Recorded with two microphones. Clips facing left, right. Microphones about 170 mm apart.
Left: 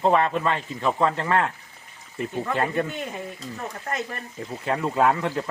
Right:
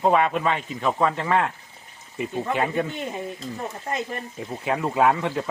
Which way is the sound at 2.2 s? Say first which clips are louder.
Right 1 dB; 20° right (ahead or behind).